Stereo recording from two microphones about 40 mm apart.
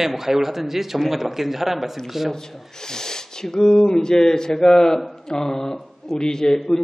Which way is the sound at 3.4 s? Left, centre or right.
Centre.